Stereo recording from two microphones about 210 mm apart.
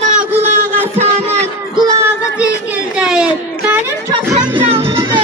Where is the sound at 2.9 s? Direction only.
5° right (ahead or behind).